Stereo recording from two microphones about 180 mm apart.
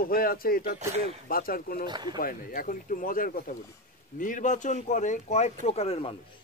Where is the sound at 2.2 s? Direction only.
50° left (ahead or behind); by 6.1 s 35° left (ahead or behind).